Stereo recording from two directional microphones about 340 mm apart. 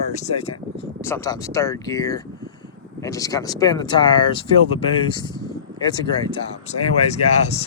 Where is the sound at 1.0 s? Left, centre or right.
Centre.